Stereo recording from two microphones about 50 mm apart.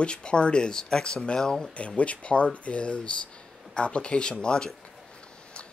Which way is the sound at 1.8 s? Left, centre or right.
Left.